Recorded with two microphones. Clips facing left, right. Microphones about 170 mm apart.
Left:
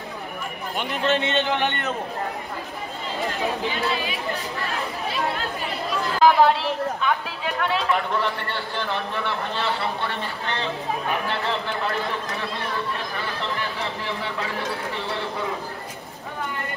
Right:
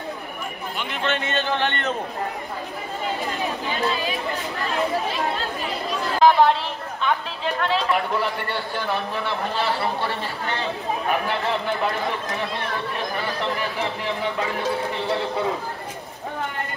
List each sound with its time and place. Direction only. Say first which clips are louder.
0.7 s a man's voice: left 4 dB; 35° left (ahead or behind)
1.2 s speech: left 1 dB; 20° left (ahead or behind)
6.2 s speech: even; 5° left (ahead or behind)